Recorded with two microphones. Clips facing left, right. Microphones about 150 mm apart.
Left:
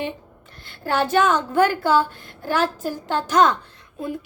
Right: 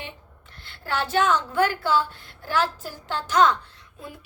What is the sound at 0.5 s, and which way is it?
A woman's voice, 45° left (ahead or behind).